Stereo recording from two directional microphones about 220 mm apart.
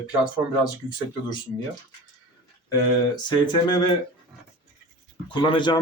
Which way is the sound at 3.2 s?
20° left (ahead or behind).